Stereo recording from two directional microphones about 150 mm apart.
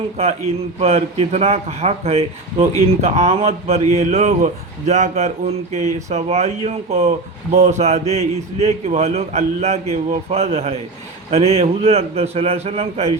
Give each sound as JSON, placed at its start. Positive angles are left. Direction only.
{"t": 0.8, "sound": "a man's voice", "side_deg": -40}